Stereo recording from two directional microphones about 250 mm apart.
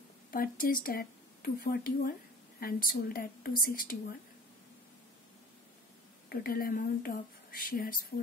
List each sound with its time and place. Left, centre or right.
0.3 s a woman's voice: left
6.2 s a woman's voice: left